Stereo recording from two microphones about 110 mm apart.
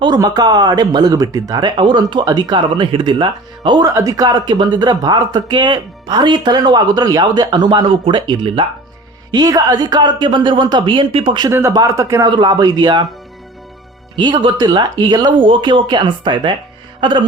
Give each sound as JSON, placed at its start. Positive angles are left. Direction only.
{"t": 0.2, "sound": "speech", "side_deg": -35}
{"t": 3.8, "sound": "speech", "side_deg": -30}
{"t": 9.3, "sound": "speech", "side_deg": -35}
{"t": 11.4, "sound": "speech", "side_deg": -30}
{"t": 14.2, "sound": "speech", "side_deg": -45}
{"t": 17.0, "sound": "music", "side_deg": -45}